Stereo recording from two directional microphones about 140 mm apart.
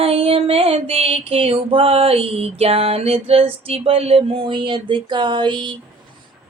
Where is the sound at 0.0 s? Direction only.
45° right (ahead or behind).